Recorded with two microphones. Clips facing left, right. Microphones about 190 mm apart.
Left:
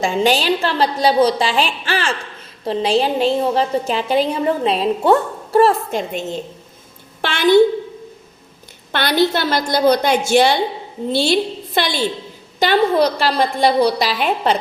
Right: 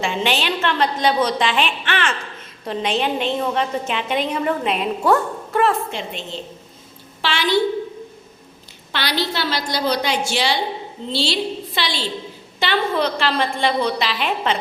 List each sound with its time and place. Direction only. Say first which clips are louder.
0.0 s a woman's voice: left 5 dB; 40° left (ahead or behind)
7.2 s a sound: left 7 dB; 50° left (ahead or behind)
8.9 s a woman's voice: left 7 dB; 50° left (ahead or behind)